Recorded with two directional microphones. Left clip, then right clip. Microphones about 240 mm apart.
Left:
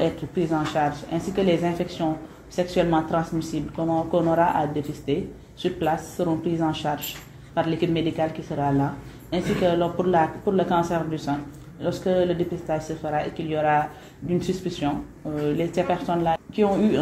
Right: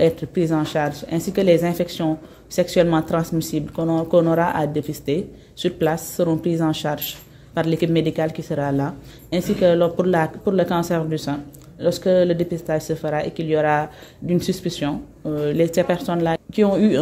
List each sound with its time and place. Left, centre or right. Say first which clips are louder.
0.0 s speech: right 6 dB; right